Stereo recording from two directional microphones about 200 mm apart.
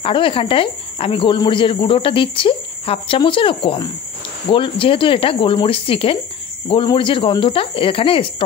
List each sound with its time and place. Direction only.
0.0 s speech: 25° left (ahead or behind)